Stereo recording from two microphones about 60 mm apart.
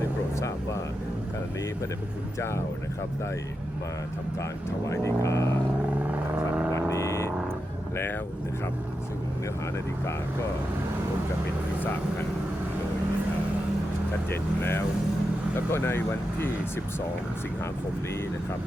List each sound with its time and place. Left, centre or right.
0.3 s vehicle: left
4.9 s speech: left
6.7 s vehicle: left
14.3 s speech: left